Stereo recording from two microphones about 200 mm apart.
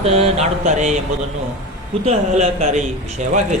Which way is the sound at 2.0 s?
35° right (ahead or behind).